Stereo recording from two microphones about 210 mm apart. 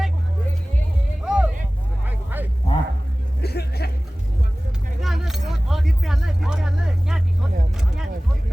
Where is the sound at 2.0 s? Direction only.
10° right (ahead or behind).